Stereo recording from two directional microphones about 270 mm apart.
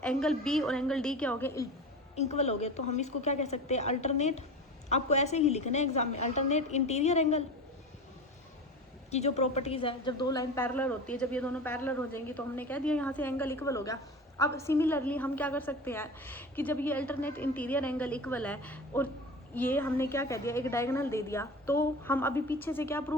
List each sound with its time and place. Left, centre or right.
0.0 s a woman's voice: centre
2.1 s a woman's voice: left
9.0 s a woman's voice: left; by 23.1 s centre